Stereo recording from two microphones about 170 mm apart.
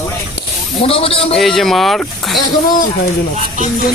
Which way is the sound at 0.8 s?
35° left (ahead or behind).